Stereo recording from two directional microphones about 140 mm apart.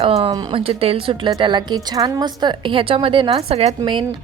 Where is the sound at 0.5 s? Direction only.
45° right (ahead or behind).